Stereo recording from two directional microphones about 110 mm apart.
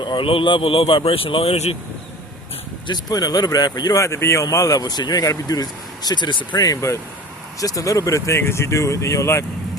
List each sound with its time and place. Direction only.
0.0 s speech: 50° left (ahead or behind); by 1.7 s 70° left (ahead or behind)
2.8 s speech: 40° left (ahead or behind)